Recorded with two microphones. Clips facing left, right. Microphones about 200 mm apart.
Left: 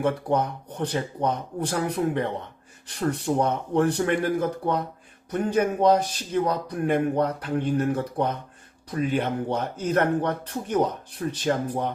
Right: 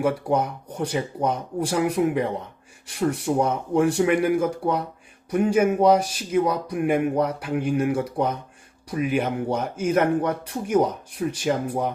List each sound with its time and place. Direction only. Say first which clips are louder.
0.0 s speech: right 1 dB; 10° right (ahead or behind)